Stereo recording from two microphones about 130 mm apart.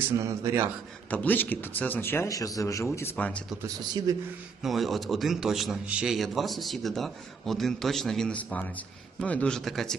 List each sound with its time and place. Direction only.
0.0 s a man's voice: 20° right (ahead or behind)
1.1 s a man's voice: 10° left (ahead or behind)
3.6 s a man's voice: 30° right (ahead or behind)
4.6 s a man's voice: centre (ahead or behind)